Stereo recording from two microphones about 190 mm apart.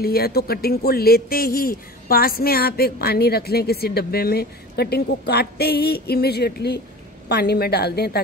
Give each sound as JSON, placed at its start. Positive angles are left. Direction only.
{"t": 0.0, "sound": "speech", "side_deg": 55}